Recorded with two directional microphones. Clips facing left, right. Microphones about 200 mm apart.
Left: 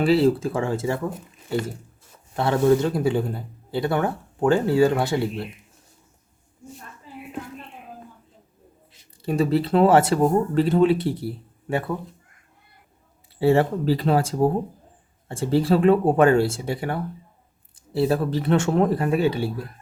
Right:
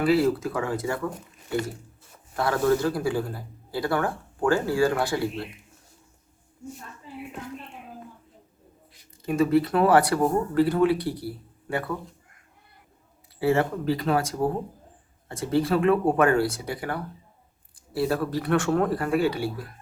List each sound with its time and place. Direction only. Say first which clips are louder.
0.0 s a man's voice: left 3 dB; 25° left (ahead or behind)
2.3 s a man's voice: left 4 dB; 25° left (ahead or behind)
8.9 s speech: left 2 dB; 30° left (ahead or behind)
13.4 s a man's voice: left 4 dB; 30° left (ahead or behind)